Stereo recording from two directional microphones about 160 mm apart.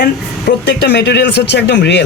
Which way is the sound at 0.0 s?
85° left.